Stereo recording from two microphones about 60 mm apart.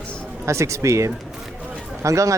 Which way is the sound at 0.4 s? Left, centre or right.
Right.